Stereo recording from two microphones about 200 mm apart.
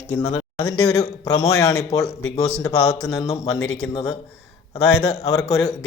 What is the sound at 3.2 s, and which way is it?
Speech, 15° left (ahead or behind).